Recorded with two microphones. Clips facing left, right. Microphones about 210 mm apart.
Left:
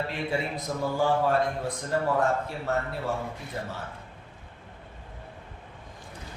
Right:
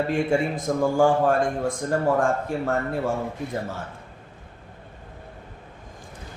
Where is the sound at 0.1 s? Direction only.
50° right (ahead or behind).